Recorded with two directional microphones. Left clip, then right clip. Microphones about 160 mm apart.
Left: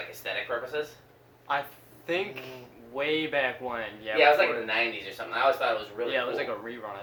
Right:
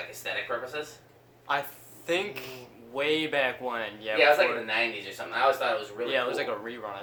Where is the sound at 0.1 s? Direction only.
10° left (ahead or behind).